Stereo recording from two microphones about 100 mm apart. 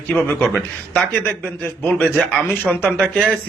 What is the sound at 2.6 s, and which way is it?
Speech, 15° left (ahead or behind).